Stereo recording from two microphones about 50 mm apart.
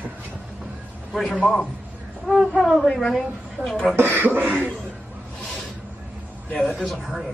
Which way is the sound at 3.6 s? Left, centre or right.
Right.